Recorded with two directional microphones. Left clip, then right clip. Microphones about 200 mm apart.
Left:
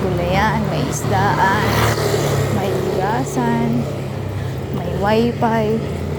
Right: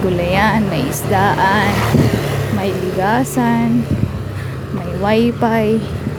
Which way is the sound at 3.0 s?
40° right (ahead or behind).